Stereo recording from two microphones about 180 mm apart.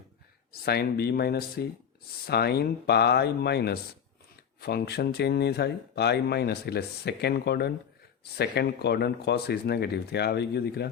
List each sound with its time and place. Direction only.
0.6 s speech: 60° left (ahead or behind)